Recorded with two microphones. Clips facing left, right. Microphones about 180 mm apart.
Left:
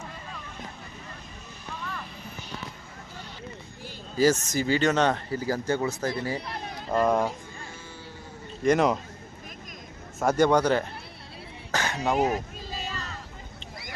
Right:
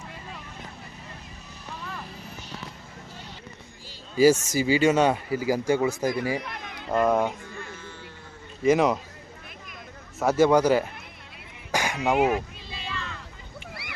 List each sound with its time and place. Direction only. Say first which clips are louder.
4.2 s speech: right 4 dB; 10° right (ahead or behind)
6.4 s a sound: left 2 dB; 35° left (ahead or behind)
6.9 s a man's voice: right 1 dB; centre (ahead or behind)
8.6 s a man's voice: right 1 dB; centre (ahead or behind)
10.2 s a man's voice: right 2 dB; 5° right (ahead or behind)
11.7 s throat clearing: right 2 dB; 10° right (ahead or behind)
12.1 s a sound: right 4 dB; 40° left (ahead or behind)